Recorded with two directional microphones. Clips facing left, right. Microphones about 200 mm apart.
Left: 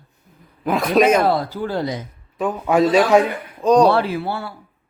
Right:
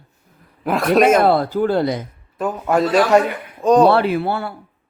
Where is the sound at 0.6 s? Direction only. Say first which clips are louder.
Right 1 dB; centre (ahead or behind).